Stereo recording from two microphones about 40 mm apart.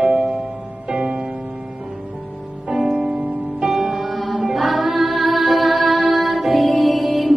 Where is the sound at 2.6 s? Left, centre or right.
Centre.